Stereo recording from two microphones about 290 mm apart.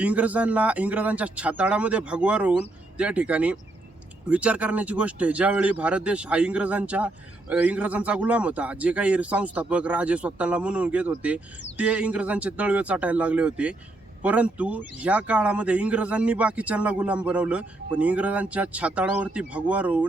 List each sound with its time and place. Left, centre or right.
0.0 s a man's voice: centre